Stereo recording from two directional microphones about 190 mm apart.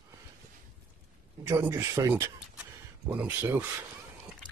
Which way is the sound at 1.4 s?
15° right (ahead or behind).